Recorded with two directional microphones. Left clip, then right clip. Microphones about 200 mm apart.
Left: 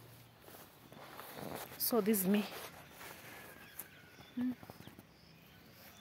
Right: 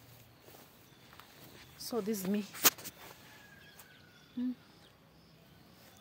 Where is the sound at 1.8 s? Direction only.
45° left (ahead or behind).